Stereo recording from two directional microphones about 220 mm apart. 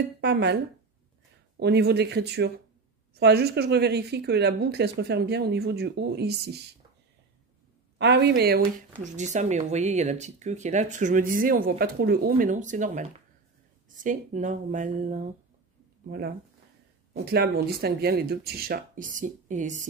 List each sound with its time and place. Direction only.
0.2 s speech: 50° right (ahead or behind)
1.6 s speech: 50° right (ahead or behind)
8.0 s speech: 50° right (ahead or behind)
9.0 s speech: 35° right (ahead or behind)